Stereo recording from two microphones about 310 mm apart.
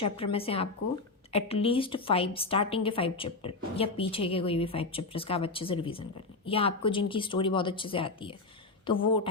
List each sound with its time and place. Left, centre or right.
0.0 s a woman's voice: centre